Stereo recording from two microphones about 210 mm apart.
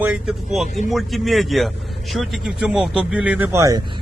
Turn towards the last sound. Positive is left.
turn(degrees=-15)  # may be behind; listen again after turning